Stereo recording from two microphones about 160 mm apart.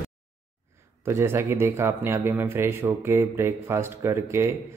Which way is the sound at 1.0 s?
15° right (ahead or behind).